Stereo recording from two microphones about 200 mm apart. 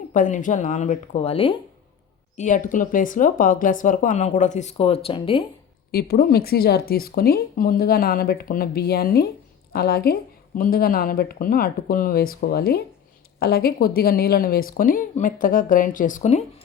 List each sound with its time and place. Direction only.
0.1 s speech: 40° left (ahead or behind)
5.9 s speech: 50° left (ahead or behind)